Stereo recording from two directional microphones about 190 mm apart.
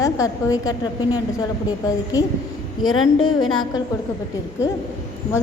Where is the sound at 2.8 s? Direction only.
90° left.